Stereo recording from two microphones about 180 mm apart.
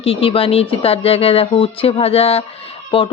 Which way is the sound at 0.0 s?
30° left (ahead or behind).